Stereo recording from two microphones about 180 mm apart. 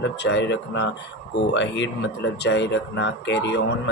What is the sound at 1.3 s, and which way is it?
Speech, 90° left.